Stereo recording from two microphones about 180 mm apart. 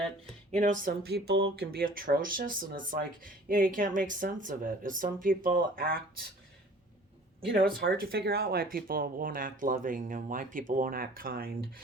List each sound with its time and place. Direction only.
0.5 s speech: 45° right (ahead or behind)
7.4 s speech: 65° right (ahead or behind)